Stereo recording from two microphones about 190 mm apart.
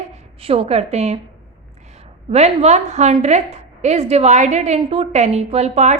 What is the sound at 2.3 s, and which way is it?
A woman's voice, 35° right (ahead or behind).